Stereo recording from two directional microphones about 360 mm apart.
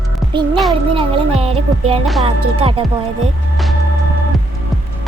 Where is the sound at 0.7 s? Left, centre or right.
Centre.